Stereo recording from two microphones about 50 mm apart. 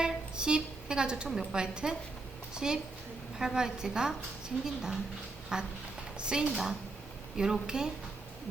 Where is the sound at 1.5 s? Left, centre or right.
Centre.